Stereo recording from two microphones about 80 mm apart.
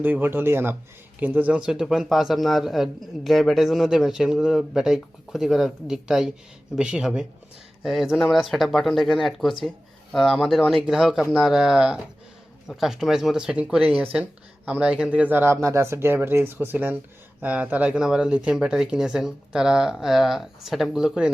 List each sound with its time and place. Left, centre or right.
0.0 s a man's voice: right
15.6 s speech: right; by 21.3 s centre